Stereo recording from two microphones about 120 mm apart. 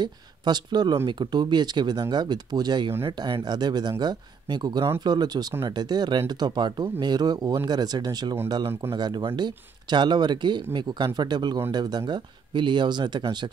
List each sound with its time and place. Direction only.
0.0 s speech: 35° right (ahead or behind)